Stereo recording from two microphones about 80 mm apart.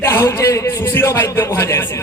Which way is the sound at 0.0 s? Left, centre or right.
Left.